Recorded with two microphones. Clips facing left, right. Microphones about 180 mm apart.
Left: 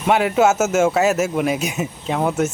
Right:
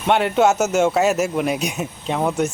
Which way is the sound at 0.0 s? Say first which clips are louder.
Left 1 dB; centre (ahead or behind).